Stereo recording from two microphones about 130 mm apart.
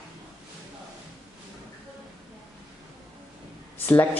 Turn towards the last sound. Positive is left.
turn(degrees=15)  # may be behind; listen again after turning